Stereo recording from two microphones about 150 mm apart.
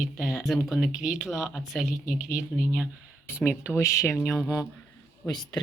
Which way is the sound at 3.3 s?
15° left (ahead or behind).